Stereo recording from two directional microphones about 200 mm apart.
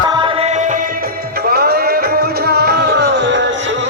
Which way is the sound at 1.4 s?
50° right (ahead or behind).